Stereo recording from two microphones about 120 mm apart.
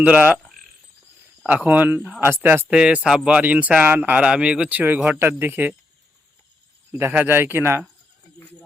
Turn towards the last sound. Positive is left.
turn(degrees=-20)  # may be behind; listen again after turning